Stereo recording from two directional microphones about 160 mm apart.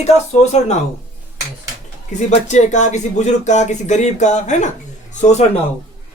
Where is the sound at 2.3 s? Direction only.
45° left (ahead or behind).